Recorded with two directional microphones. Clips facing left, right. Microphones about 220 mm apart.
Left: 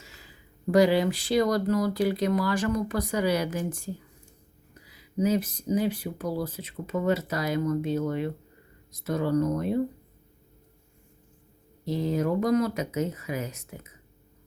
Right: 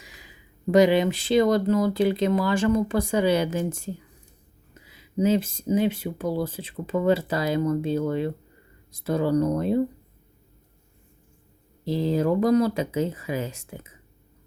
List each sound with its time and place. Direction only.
0.0 s speech: 15° right (ahead or behind)
11.9 s speech: 30° right (ahead or behind)